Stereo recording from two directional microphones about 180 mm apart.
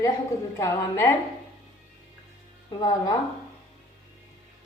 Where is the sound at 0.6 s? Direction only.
15° left (ahead or behind).